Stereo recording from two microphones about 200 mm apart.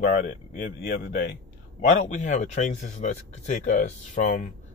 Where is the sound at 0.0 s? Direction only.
40° left (ahead or behind).